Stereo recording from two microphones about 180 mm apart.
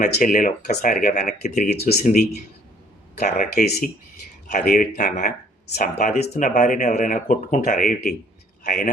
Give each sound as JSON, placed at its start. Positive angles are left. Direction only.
{"t": 0.0, "sound": "speech", "side_deg": 45}
{"t": 3.2, "sound": "speech", "side_deg": 45}